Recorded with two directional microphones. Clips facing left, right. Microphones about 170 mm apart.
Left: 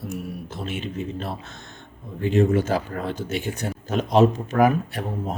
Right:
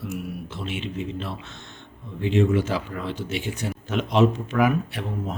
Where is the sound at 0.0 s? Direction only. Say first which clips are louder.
Even; 40° left (ahead or behind).